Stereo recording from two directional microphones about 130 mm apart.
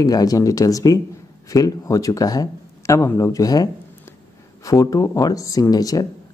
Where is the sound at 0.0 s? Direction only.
30° left (ahead or behind).